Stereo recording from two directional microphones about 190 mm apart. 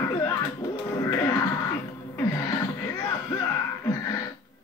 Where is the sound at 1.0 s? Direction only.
15° left (ahead or behind).